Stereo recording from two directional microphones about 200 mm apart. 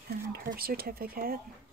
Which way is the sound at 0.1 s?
50° right (ahead or behind).